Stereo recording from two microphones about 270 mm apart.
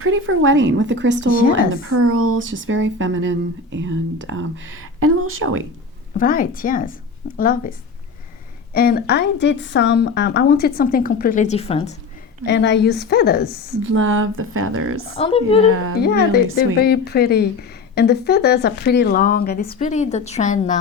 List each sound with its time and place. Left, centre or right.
0.0 s speech: right
1.3 s speech: left
2.0 s speech: right
6.1 s speech: left
8.7 s speech: left
12.5 s speech: left
13.9 s speech: right
15.1 s speech: left
15.7 s speech: right
16.0 s speech: left